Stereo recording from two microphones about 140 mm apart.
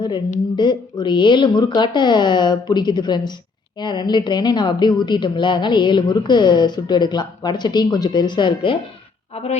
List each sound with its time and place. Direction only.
0.5 s a woman's voice: 30° left (ahead or behind)
9.3 s speech: 45° left (ahead or behind)